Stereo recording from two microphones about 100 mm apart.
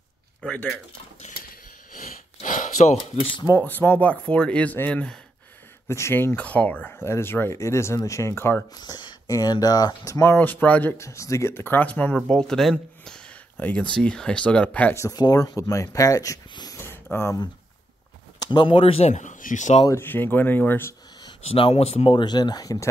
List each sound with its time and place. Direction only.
0.4 s speech: 10° left (ahead or behind)
3.4 s speech: 20° left (ahead or behind)
5.9 s speech: 25° left (ahead or behind)
8.7 s speech: 40° left (ahead or behind)
10.2 s speech: 20° left (ahead or behind)
11.1 s speech: 30° left (ahead or behind); by 15.0 s 15° left (ahead or behind)
15.0 s speech: 40° left (ahead or behind)
16.8 s a sound: 25° left (ahead or behind)
18.4 s speech: 50° left (ahead or behind); by 19.0 s 70° left (ahead or behind)
19.9 s speech: 20° left (ahead or behind)
21.5 s speech: 70° left (ahead or behind); by 22.1 s 90° left
22.1 s speech: 45° left (ahead or behind)